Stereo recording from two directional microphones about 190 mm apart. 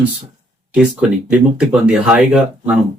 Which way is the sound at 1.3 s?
5° right (ahead or behind).